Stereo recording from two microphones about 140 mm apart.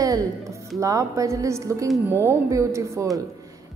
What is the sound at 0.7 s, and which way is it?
A woman's voice, 25° right (ahead or behind).